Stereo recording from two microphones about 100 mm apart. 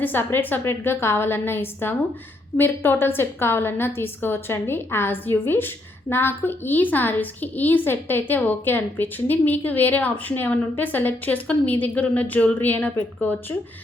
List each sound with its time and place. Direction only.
0.0 s a woman's voice: 20° left (ahead or behind)